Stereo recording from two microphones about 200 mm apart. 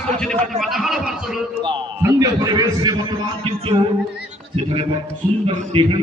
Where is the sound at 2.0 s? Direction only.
15° right (ahead or behind).